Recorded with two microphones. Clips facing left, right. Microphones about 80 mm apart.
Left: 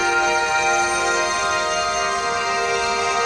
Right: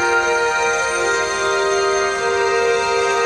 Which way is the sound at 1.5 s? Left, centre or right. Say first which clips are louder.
Right 4 dB; right.